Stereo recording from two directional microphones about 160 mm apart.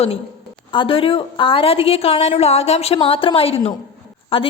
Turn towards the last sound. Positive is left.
turn(degrees=35)  # may be behind; listen again after turning